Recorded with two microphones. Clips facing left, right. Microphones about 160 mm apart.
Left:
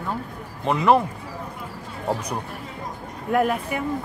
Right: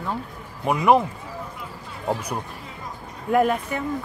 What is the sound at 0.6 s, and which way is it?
Speech, 15° right (ahead or behind).